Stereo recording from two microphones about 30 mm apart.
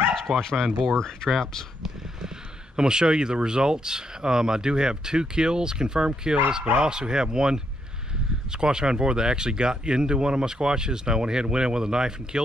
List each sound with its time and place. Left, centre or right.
0.4 s speech: centre
2.7 s speech: right